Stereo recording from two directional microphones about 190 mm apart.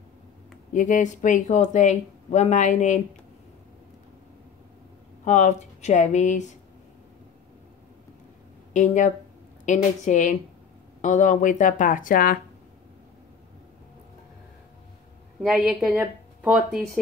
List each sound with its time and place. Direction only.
0.7 s speech: 40° left (ahead or behind)
5.2 s speech: 40° left (ahead or behind)
8.7 s speech: 40° left (ahead or behind)
15.4 s a woman's voice: centre (ahead or behind)